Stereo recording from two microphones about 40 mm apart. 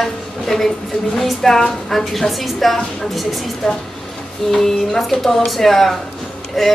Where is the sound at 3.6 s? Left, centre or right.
Centre.